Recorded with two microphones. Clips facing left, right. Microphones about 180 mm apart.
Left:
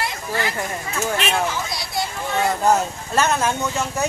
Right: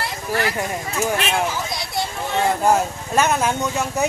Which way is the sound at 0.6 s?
15° right (ahead or behind).